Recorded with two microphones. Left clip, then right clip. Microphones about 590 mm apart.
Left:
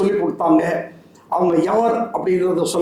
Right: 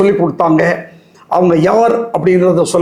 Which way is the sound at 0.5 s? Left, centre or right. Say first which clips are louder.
Right 5 dB; right.